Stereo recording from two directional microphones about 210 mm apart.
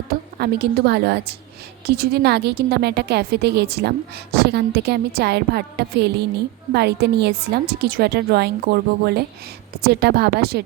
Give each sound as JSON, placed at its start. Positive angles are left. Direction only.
{"t": 0.1, "sound": "a woman's voice", "side_deg": -45}